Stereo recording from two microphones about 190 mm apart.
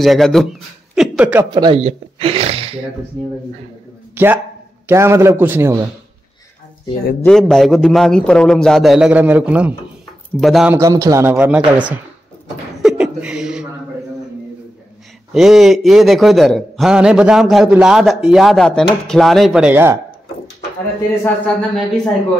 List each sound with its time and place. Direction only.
0.0 s a man's voice: centre (ahead or behind)
1.5 s speech: 20° right (ahead or behind)
1.8 s gasp: 35° right (ahead or behind)
4.1 s a sound: 10° right (ahead or behind)
4.8 s speech: 15° right (ahead or behind)
7.2 s a man's voice: centre (ahead or behind)
10.7 s speech: 15° right (ahead or behind)
12.8 s a sound: 5° right (ahead or behind)
15.3 s a man's voice: centre (ahead or behind)
21.2 s a man's voice: 5° left (ahead or behind)